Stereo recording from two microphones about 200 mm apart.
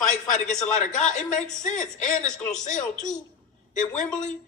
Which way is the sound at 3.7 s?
40° left (ahead or behind).